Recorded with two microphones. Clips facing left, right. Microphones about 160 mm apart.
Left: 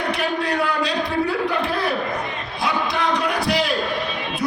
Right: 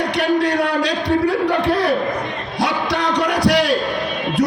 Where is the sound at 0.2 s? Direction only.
80° right.